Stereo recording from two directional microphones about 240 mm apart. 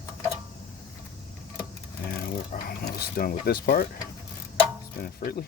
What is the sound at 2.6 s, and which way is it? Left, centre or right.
Speech, left.